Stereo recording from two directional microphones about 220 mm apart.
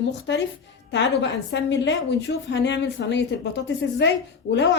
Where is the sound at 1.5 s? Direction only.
55° left (ahead or behind).